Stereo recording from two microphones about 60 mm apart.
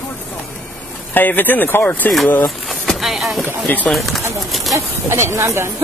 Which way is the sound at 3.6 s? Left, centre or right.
Left.